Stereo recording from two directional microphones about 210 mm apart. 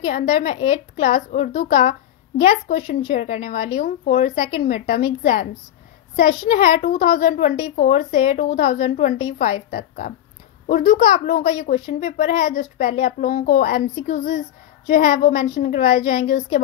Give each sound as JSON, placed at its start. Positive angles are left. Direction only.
{"t": 0.0, "sound": "a woman's voice", "side_deg": 35}